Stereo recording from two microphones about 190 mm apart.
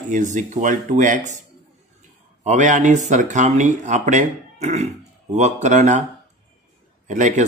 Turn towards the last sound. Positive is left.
turn(degrees=-40)  # may be behind; listen again after turning